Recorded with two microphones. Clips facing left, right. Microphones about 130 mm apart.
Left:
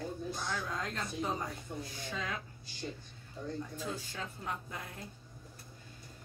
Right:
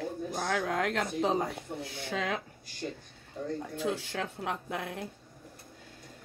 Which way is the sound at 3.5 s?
65° right (ahead or behind).